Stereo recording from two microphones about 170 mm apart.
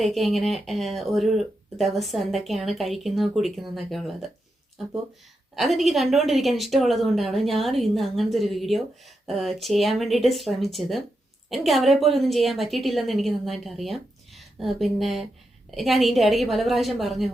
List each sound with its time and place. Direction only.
0.0 s speech: centre (ahead or behind)
5.5 s speech: centre (ahead or behind)